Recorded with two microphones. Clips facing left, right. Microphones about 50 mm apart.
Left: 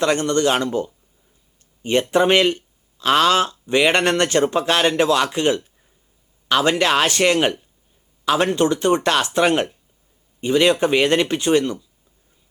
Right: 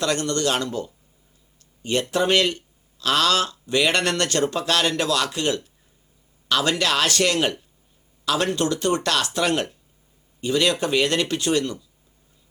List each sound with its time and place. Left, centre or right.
0.0 s speech: left